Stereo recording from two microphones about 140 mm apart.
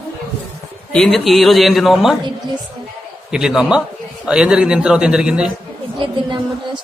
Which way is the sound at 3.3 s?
5° right (ahead or behind).